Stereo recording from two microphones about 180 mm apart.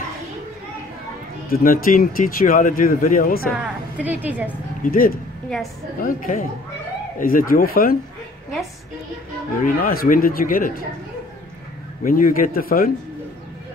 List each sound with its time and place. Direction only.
1.5 s speech: 50° left (ahead or behind)
3.6 s a woman's voice: 10° right (ahead or behind)
4.8 s speech: 50° left (ahead or behind)
9.6 s speech: 55° left (ahead or behind)
12.0 s speech: 50° left (ahead or behind)